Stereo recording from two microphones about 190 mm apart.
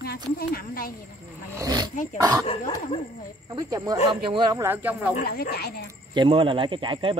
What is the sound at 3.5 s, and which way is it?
Speech, 20° right (ahead or behind).